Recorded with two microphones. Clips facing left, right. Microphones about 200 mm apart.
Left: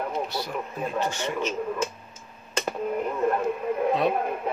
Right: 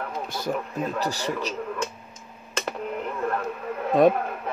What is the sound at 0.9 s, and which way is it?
Speech, 35° right (ahead or behind).